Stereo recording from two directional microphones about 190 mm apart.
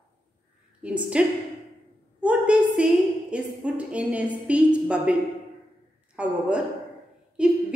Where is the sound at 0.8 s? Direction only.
5° right (ahead or behind).